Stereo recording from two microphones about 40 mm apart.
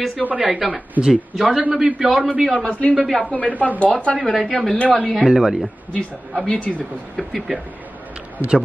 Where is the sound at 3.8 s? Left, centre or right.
Left.